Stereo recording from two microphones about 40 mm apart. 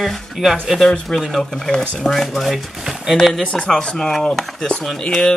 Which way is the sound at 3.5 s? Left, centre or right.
Centre.